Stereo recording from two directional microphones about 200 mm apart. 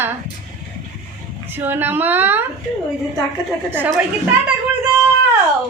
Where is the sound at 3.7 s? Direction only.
10° right (ahead or behind).